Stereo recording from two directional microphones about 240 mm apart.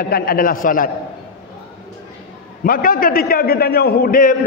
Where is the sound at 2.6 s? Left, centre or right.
Left.